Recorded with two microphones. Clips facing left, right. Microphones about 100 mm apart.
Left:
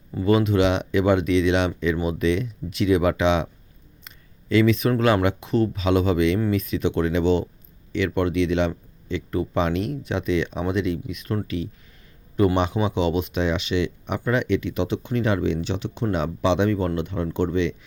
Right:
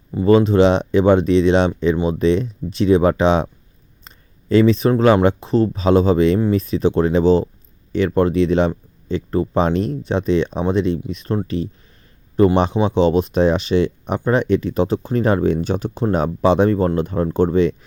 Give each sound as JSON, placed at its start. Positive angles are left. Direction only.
{"t": 0.3, "sound": "speech", "side_deg": -35}